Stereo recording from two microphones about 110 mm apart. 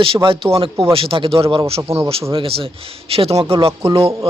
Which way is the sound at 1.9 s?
65° right (ahead or behind).